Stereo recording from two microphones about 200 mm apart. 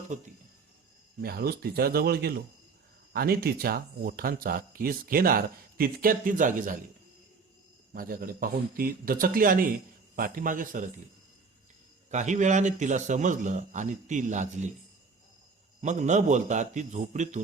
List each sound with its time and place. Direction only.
0.1 s a man's voice: 35° right (ahead or behind)
1.2 s speech: 50° right (ahead or behind)
7.9 s speech: 45° right (ahead or behind)
12.1 s a man's voice: 35° right (ahead or behind)
15.8 s a man's voice: 35° right (ahead or behind)